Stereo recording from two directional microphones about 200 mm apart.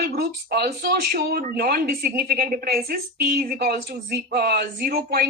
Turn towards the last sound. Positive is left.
turn(degrees=-50)  # may be behind; listen again after turning